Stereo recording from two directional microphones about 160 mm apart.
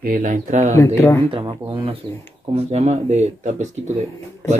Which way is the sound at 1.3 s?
25° right (ahead or behind).